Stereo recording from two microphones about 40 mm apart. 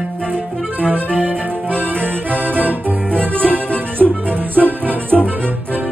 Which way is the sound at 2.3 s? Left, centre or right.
Right.